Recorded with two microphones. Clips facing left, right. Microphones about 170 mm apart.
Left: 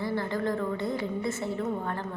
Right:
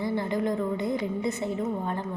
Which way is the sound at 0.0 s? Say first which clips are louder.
Right 2 dB; 15° right (ahead or behind).